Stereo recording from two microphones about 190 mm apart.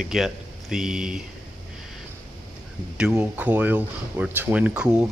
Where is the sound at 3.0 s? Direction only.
5° right (ahead or behind).